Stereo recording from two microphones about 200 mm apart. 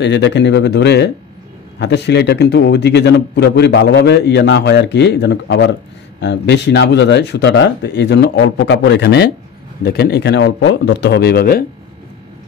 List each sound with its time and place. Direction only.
0.0 s a man's voice: 60° left (ahead or behind)